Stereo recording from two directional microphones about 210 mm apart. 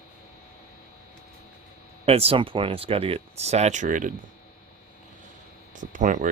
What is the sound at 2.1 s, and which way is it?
Speech, 30° right (ahead or behind).